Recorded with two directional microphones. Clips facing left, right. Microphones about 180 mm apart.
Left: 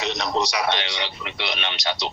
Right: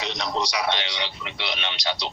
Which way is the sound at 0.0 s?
50° left (ahead or behind).